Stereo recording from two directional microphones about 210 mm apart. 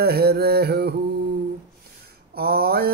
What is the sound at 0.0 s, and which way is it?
Male singing, 50° right (ahead or behind).